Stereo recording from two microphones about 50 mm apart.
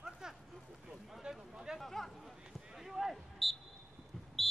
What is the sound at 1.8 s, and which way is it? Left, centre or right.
Speech, centre.